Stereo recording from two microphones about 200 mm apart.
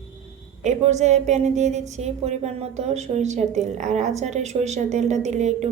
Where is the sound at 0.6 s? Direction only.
35° right (ahead or behind).